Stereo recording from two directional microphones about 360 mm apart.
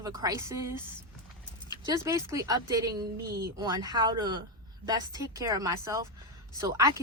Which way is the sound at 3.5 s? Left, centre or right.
Centre.